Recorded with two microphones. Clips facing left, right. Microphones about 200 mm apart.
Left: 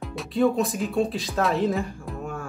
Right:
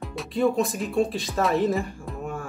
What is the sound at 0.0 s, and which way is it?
Speech, centre (ahead or behind).